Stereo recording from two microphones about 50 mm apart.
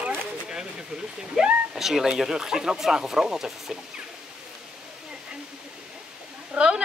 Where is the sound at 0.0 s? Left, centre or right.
Centre.